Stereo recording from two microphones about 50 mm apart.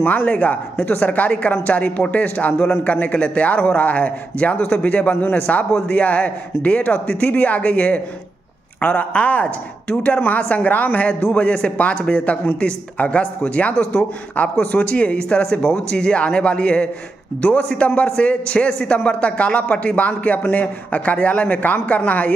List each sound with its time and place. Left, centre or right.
0.0 s a woman's voice: left
4.6 s a woman's voice: left
4.8 s a man's voice: left
13.7 s a woman's voice: left
14.7 s a man's voice: left
17.4 s a woman's voice: left